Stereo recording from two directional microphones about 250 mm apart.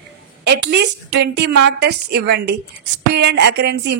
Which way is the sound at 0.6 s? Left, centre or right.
Right.